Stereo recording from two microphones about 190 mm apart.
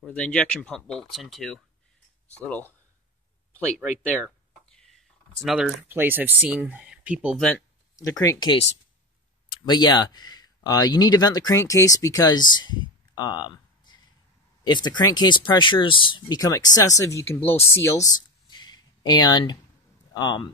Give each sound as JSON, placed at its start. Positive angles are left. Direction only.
{"t": 0.0, "sound": "speech", "side_deg": 5}
{"t": 4.0, "sound": "speech", "side_deg": 5}
{"t": 8.0, "sound": "speech", "side_deg": 15}
{"t": 17.7, "sound": "a sound", "side_deg": 15}
{"t": 20.2, "sound": "speech", "side_deg": 20}